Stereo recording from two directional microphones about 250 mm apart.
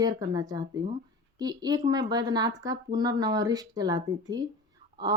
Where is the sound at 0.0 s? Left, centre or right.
Centre.